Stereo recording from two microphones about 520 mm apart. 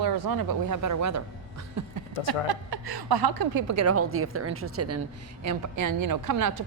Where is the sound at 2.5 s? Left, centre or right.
Right.